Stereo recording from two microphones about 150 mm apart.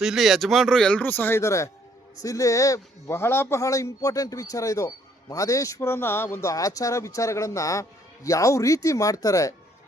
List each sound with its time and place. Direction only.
0.0 s a man's voice: centre (ahead or behind); by 9.6 s 20° left (ahead or behind)